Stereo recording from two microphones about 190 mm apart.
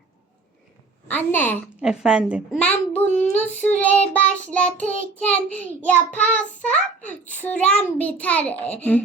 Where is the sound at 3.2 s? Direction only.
35° left (ahead or behind).